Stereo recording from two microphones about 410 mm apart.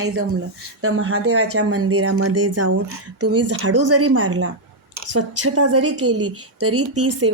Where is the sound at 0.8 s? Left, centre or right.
Right.